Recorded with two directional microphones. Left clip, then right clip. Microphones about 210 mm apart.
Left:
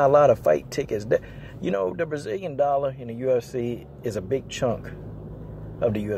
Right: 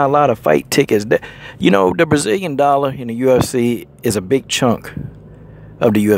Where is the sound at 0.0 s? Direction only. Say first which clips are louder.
Right 4 dB; 35° right (ahead or behind).